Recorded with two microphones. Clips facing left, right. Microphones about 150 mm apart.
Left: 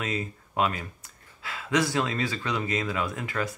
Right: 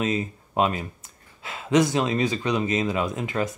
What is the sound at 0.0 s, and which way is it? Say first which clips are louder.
Speech: right 6 dB; 20° right (ahead or behind).